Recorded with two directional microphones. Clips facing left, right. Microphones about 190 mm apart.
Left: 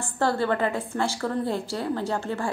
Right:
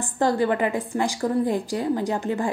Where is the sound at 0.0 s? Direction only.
15° right (ahead or behind).